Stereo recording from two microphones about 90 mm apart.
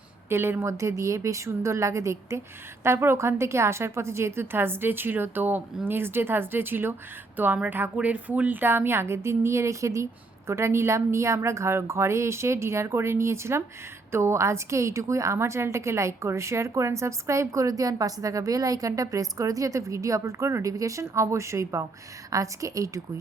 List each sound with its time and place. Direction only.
0.3 s a woman's voice: 25° right (ahead or behind)